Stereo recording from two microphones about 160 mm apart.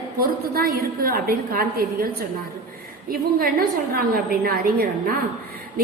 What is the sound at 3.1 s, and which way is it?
A woman's voice, 65° right (ahead or behind).